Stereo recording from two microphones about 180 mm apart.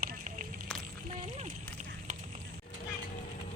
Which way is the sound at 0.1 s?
45° right (ahead or behind).